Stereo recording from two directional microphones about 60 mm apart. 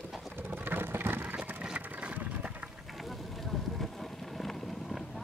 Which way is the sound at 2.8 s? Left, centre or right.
Centre.